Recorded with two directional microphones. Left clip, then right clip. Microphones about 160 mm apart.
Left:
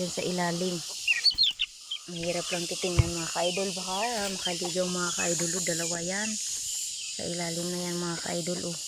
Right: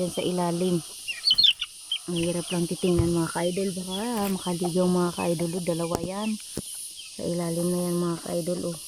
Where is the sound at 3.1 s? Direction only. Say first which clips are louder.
Right 2 dB; 25° right (ahead or behind); by 8.7 s 10° right (ahead or behind).